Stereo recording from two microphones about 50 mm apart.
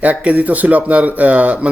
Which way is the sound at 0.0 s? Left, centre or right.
Right.